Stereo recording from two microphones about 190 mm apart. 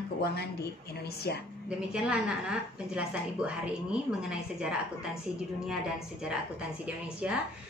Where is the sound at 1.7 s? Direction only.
5° right (ahead or behind).